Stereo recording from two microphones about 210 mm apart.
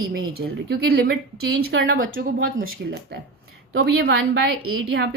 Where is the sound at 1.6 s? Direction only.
65° right (ahead or behind).